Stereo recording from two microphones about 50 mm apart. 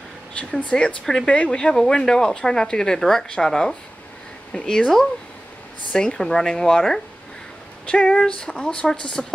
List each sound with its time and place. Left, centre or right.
0.4 s speech: left